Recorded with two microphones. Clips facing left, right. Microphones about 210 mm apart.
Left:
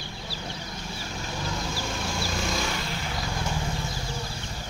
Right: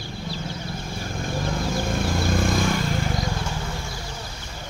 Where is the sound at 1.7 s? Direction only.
55° right (ahead or behind).